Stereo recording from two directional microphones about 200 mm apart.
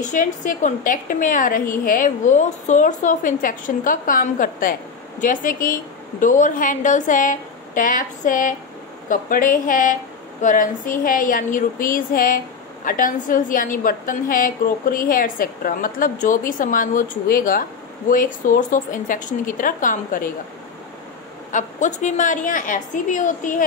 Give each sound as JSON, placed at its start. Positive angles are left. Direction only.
{"t": 0.0, "sound": "a woman's voice", "side_deg": 40}
{"t": 21.5, "sound": "a woman's voice", "side_deg": 40}